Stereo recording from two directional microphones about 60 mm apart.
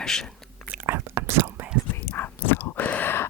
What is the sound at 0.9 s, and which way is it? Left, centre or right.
Whispering, right.